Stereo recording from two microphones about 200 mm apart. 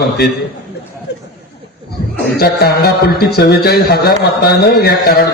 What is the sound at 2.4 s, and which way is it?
A man's voice, 50° left (ahead or behind).